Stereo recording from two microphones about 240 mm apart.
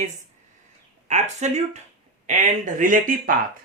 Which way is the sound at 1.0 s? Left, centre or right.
Right.